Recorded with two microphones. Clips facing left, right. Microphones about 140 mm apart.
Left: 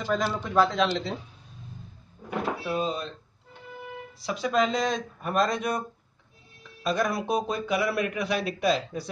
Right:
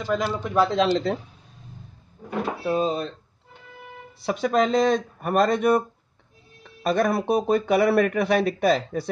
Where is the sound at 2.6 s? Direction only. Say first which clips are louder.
Right 9 dB; 25° right (ahead or behind).